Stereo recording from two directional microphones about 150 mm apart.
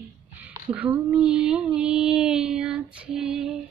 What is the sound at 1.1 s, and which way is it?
Child singing, 5° right (ahead or behind).